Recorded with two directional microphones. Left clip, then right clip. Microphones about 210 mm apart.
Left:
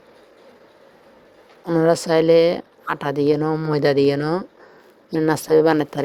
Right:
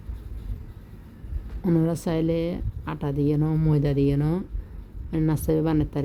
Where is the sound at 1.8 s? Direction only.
15° left (ahead or behind).